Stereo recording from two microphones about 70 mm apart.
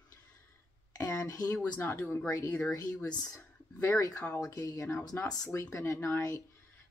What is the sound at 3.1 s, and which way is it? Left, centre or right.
Speech, left.